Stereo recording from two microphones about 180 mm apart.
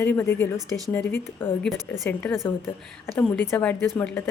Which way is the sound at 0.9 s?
10° left (ahead or behind).